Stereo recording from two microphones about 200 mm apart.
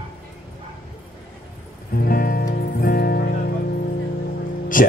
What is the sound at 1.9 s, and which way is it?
Music, 45° left (ahead or behind).